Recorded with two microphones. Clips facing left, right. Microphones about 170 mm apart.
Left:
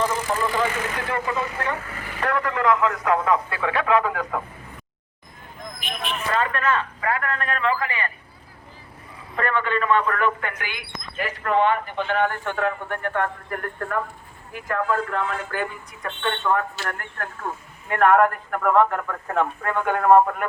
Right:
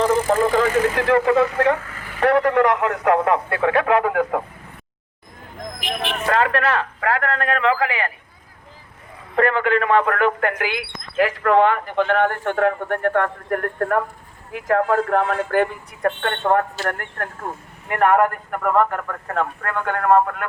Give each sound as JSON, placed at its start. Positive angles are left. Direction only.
{"t": 0.1, "sound": "speech", "side_deg": -50}
{"t": 0.9, "sound": "speech", "side_deg": -90}
{"t": 2.2, "sound": "speech", "side_deg": -65}
{"t": 5.8, "sound": "speech", "side_deg": -75}
{"t": 6.1, "sound": "a man's voice", "side_deg": -60}
{"t": 9.3, "sound": "speech", "side_deg": -65}
{"t": 11.9, "sound": "speech", "side_deg": -50}
{"t": 17.9, "sound": "speech", "side_deg": -10}